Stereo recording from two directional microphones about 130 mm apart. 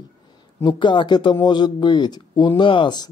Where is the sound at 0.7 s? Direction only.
35° left (ahead or behind).